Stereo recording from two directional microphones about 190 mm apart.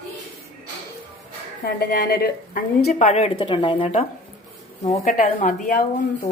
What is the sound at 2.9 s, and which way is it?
Speech, 35° left (ahead or behind).